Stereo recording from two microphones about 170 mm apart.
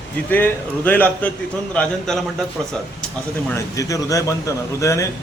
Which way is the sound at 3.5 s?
20° left (ahead or behind).